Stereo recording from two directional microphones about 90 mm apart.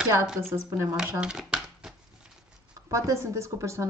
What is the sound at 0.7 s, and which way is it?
Speech, 30° right (ahead or behind).